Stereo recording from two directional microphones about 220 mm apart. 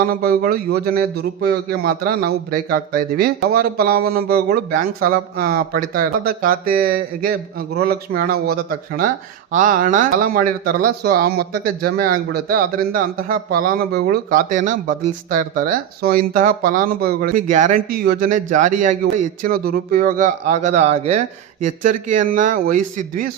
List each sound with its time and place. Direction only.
0.0 s speech: 45° right (ahead or behind)